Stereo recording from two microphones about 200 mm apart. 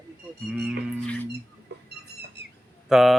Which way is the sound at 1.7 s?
55° right (ahead or behind).